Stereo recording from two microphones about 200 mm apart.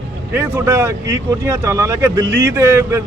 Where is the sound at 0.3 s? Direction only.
10° right (ahead or behind).